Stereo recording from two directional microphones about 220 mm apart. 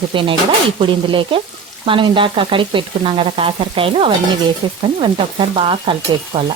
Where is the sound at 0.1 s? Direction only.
25° right (ahead or behind).